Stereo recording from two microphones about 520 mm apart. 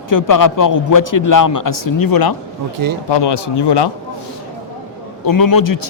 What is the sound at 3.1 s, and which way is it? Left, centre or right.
Speech, left.